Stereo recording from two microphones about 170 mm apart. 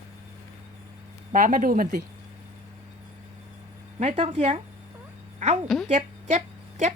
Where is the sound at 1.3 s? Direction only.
50° right (ahead or behind).